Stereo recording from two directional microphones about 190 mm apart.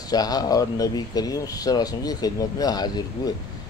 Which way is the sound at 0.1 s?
20° left (ahead or behind).